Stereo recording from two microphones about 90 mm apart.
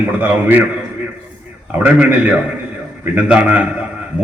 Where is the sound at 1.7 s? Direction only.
15° right (ahead or behind).